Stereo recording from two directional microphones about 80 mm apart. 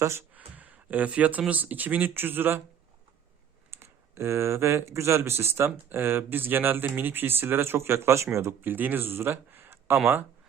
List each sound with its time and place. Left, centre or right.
0.0 s speech: right
0.3 s speech: centre
3.7 s speech: right